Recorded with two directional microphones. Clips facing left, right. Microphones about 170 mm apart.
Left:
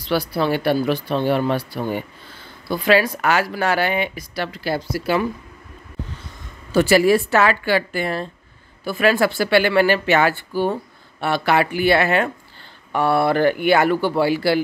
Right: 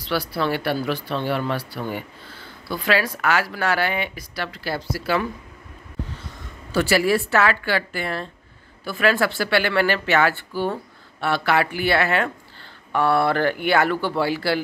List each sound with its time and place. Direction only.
0.0 s speech: 15° left (ahead or behind)
6.7 s speech: 20° left (ahead or behind)